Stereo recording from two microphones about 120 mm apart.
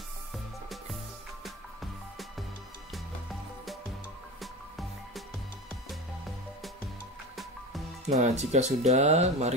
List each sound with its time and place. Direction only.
1.4 s music: centre (ahead or behind)
8.1 s speech: 70° right (ahead or behind)